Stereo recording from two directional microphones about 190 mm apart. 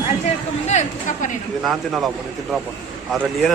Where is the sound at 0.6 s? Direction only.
40° left (ahead or behind).